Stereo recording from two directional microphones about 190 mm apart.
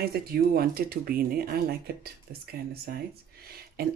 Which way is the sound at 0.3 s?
50° right (ahead or behind).